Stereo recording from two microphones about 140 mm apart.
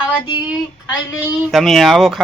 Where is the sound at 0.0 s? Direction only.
10° right (ahead or behind).